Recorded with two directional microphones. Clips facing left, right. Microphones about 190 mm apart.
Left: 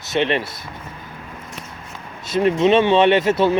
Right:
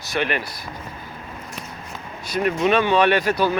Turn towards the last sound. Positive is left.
turn(degrees=25)  # may be behind; listen again after turning